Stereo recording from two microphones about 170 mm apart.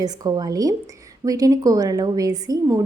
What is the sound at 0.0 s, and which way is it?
A woman's voice, 20° right (ahead or behind).